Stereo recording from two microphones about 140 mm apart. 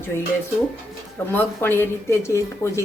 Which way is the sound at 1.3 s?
15° left (ahead or behind).